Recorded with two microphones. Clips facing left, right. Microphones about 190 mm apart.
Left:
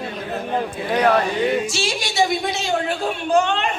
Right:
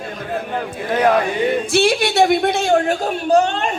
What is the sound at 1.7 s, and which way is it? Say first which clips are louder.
A man's voice: right 7 dB; 60° right (ahead or behind).